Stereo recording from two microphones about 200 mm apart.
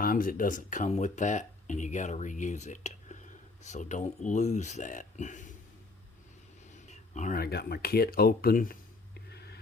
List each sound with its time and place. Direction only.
0.0 s speech: 45° left (ahead or behind)
7.1 s speech: 35° left (ahead or behind)
9.3 s wheeze: 55° left (ahead or behind)